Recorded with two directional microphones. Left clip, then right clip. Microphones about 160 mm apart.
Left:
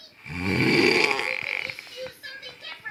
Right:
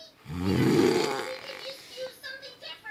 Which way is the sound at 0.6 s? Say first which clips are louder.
Left 4 dB; 15° right (ahead or behind).